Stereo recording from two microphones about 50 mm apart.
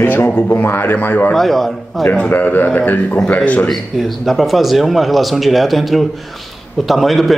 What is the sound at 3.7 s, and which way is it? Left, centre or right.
A man's voice, centre.